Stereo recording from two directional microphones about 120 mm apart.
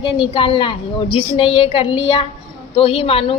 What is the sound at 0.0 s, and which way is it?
A woman's voice, 50° left (ahead or behind).